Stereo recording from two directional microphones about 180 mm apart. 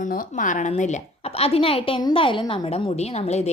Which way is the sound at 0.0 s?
50° left (ahead or behind).